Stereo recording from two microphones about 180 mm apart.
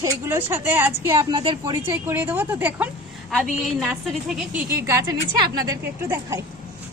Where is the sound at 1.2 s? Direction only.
25° right (ahead or behind).